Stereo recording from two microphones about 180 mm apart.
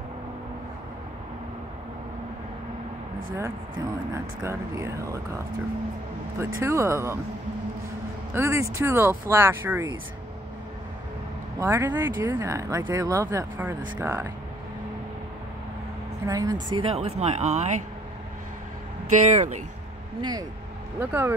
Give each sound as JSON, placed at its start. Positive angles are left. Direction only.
{"t": 3.3, "sound": "speech", "side_deg": -15}
{"t": 8.3, "sound": "speech", "side_deg": -15}
{"t": 11.6, "sound": "speech", "side_deg": -15}
{"t": 16.3, "sound": "speech", "side_deg": -20}
{"t": 16.7, "sound": "speech", "side_deg": -35}
{"t": 19.0, "sound": "speech", "side_deg": -40}
{"t": 20.2, "sound": "speech", "side_deg": -20}
{"t": 21.0, "sound": "speech", "side_deg": -10}